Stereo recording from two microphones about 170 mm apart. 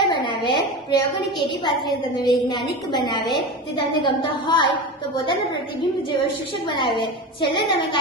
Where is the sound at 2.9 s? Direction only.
25° left (ahead or behind).